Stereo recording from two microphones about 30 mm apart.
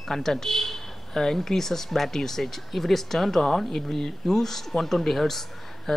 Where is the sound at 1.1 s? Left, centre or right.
Centre.